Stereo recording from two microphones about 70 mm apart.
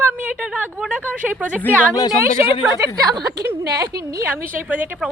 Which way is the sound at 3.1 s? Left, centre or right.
Right.